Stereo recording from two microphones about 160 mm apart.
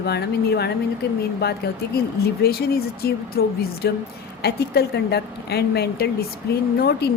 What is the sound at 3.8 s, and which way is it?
A woman's voice, 85° left.